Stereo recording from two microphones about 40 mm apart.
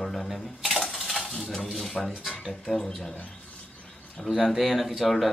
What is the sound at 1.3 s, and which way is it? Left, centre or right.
Speech, centre.